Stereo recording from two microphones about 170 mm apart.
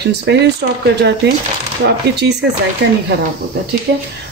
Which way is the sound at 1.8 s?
80° right.